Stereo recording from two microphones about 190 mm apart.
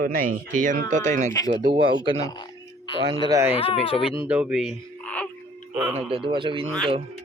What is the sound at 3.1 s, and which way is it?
Speech, 20° right (ahead or behind).